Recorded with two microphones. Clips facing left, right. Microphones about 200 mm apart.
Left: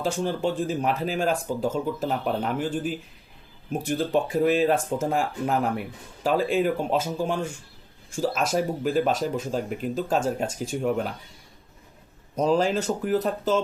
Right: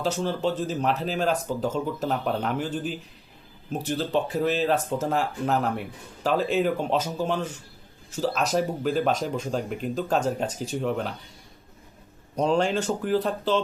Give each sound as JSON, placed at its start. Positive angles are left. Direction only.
{"t": 0.0, "sound": "speech", "side_deg": 15}
{"t": 3.7, "sound": "speech", "side_deg": 10}
{"t": 12.4, "sound": "speech", "side_deg": 5}